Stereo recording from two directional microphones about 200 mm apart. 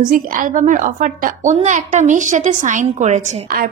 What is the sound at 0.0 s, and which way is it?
A woman's voice, 40° right (ahead or behind).